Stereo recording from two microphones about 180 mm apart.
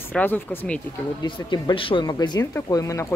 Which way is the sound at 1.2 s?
25° left (ahead or behind).